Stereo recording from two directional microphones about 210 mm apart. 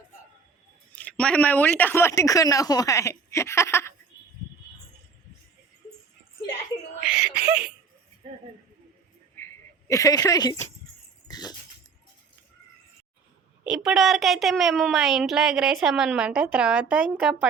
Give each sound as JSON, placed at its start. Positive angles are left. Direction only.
{"t": 0.9, "sound": "speech", "side_deg": 5}
{"t": 7.0, "sound": "a woman's voice", "side_deg": -5}
{"t": 9.3, "sound": "a sound", "side_deg": 10}
{"t": 13.7, "sound": "a woman's voice", "side_deg": -5}